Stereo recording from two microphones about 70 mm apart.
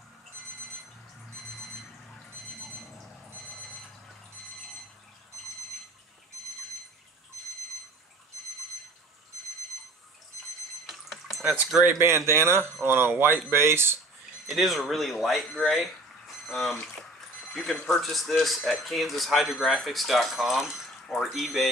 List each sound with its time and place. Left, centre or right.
10.9 s a sound: centre
11.8 s speech: right
14.4 s speech: centre